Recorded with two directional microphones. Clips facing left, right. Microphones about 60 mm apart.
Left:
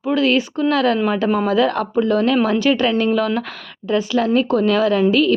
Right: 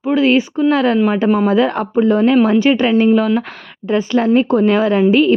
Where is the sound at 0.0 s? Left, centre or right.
Right.